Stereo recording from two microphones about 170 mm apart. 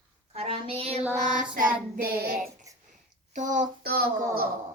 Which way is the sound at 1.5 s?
60° right (ahead or behind).